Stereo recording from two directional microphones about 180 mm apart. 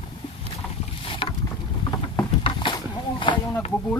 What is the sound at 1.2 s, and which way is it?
Boat, 30° left (ahead or behind).